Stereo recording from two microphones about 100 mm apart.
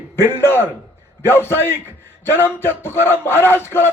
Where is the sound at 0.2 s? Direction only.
25° left (ahead or behind).